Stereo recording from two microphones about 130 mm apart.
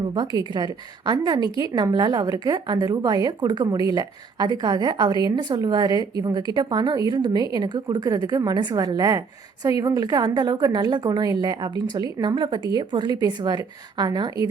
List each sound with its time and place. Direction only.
0.1 s a woman's voice: 30° right (ahead or behind)